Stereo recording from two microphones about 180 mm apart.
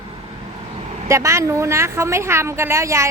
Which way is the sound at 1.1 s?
15° right (ahead or behind).